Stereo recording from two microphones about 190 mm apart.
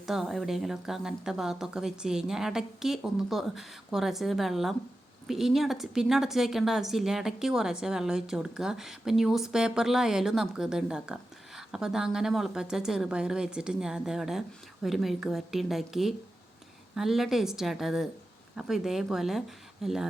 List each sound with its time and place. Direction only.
0.0 s a woman's voice: centre (ahead or behind)